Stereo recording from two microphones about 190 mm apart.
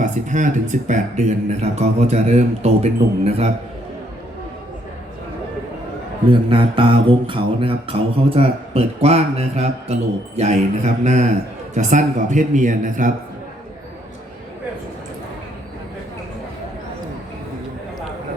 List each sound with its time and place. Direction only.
0.0 s mantra: 40° right (ahead or behind)
6.3 s mantra: 25° right (ahead or behind); by 13.1 s 40° right (ahead or behind)